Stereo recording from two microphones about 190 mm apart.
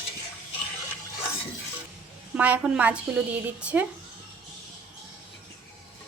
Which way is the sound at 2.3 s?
5° right (ahead or behind).